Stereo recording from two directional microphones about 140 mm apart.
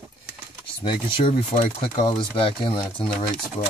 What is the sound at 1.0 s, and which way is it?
Speech, 35° left (ahead or behind).